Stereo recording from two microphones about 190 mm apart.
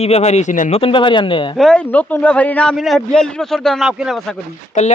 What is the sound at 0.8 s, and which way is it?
Speech, 25° left (ahead or behind).